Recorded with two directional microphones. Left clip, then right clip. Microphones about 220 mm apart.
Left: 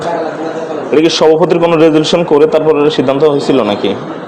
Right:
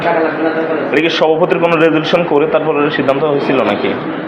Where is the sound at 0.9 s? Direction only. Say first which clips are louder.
Left 5 dB; 60° left (ahead or behind).